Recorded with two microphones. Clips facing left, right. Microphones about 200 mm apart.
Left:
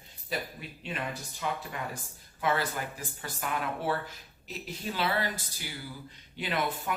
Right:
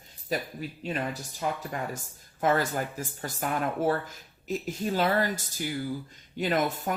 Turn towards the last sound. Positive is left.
turn(degrees=-45)  # may be behind; listen again after turning